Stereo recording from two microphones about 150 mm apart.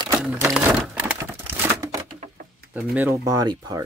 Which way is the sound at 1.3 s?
15° right (ahead or behind).